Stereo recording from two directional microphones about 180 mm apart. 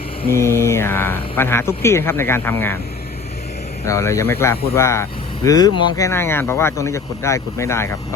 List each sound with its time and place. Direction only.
0.3 s speech: 15° left (ahead or behind)
3.8 s speech: 15° left (ahead or behind)